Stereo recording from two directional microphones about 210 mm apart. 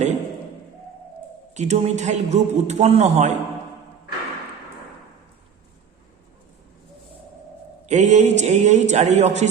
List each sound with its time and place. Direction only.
1.5 s a man's voice: 30° right (ahead or behind)
7.9 s a man's voice: 35° right (ahead or behind)